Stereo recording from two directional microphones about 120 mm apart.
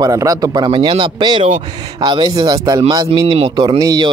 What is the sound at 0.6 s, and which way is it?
Speech, 45° right (ahead or behind).